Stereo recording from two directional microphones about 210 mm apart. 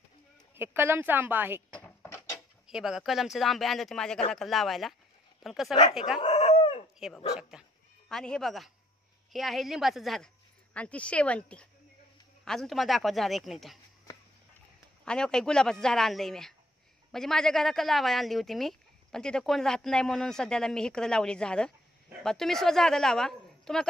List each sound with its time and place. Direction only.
0.6 s a woman's voice: 10° right (ahead or behind)
1.7 s a sound: 10° left (ahead or behind)
2.7 s speech: centre (ahead or behind)
6.2 s chicken: 30° left (ahead or behind)
7.0 s speech: centre (ahead or behind)
15.0 s speech: 5° left (ahead or behind)